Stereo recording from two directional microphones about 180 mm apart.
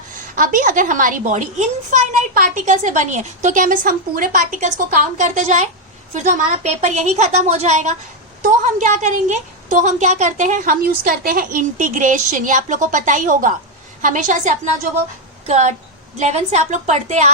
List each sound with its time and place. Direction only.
0.3 s a woman's voice: 50° right (ahead or behind)